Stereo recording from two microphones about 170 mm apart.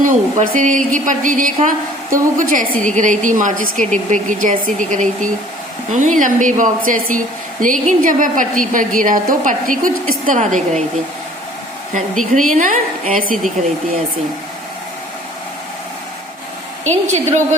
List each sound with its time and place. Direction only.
0.0 s a woman's voice: 50° right (ahead or behind)
12.3 s a woman's voice: 50° right (ahead or behind)
17.1 s a woman's voice: 45° right (ahead or behind)